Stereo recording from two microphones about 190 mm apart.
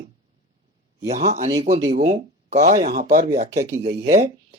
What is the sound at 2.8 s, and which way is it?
Speech, 50° right (ahead or behind).